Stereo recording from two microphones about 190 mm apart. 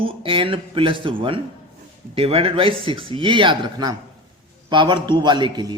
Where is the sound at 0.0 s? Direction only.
30° right (ahead or behind).